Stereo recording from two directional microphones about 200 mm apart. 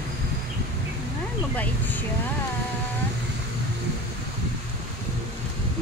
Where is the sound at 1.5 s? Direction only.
10° left (ahead or behind).